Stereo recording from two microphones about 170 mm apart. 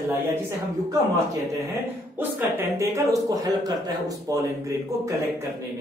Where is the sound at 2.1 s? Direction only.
10° right (ahead or behind).